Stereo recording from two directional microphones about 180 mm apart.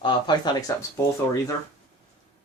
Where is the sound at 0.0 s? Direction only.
25° left (ahead or behind).